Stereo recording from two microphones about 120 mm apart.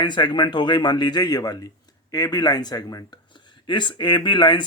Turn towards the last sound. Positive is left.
turn(degrees=40)  # may be behind; listen again after turning